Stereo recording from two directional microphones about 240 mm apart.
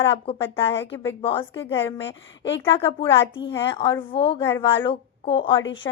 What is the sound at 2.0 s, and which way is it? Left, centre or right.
Speech, left.